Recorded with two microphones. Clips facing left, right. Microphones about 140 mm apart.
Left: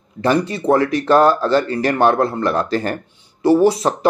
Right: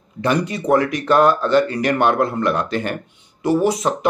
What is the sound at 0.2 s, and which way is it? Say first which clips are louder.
Speech: left 2 dB; 30° left (ahead or behind).